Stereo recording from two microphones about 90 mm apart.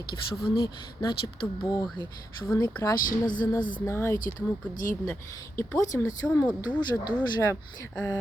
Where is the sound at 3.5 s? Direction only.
25° left (ahead or behind).